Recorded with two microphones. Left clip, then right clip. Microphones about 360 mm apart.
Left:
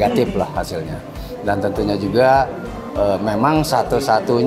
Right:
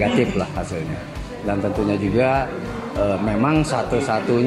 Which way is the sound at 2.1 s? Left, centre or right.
Left.